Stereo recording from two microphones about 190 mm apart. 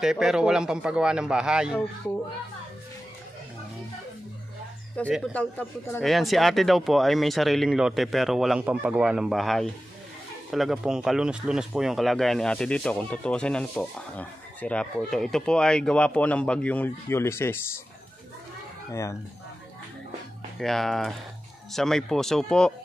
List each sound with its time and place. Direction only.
0.0 s speech: centre (ahead or behind)
4.9 s speech: 5° left (ahead or behind)
18.9 s speech: 15° left (ahead or behind)
20.5 s speech: centre (ahead or behind)